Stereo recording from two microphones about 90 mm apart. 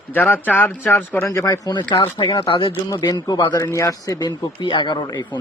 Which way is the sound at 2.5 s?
70° left (ahead or behind).